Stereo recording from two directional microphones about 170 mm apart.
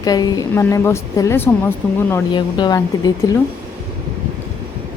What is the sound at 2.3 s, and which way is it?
A woman's voice, 30° left (ahead or behind).